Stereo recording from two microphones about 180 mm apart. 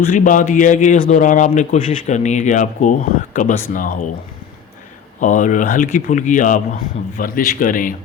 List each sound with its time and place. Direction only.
0.1 s a man's voice: 45° left (ahead or behind)
5.2 s a man's voice: 45° left (ahead or behind)